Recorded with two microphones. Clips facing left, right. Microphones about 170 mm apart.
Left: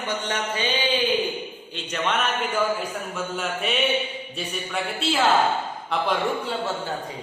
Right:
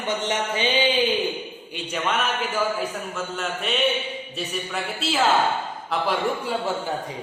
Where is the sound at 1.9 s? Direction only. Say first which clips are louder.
Even; 5° right (ahead or behind).